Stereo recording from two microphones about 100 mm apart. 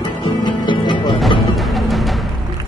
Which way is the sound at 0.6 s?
50° left (ahead or behind).